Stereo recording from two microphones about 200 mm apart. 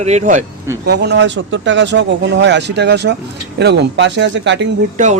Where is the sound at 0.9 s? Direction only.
55° right (ahead or behind).